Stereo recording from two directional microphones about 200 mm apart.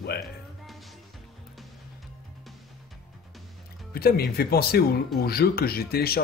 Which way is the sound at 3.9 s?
50° left (ahead or behind).